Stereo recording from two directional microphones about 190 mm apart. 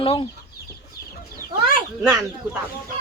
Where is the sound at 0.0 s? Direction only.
30° left (ahead or behind).